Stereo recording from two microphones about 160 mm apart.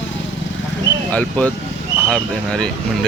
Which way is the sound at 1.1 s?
10° left (ahead or behind).